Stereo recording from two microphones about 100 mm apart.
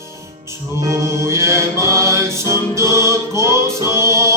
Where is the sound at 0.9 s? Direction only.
30° right (ahead or behind).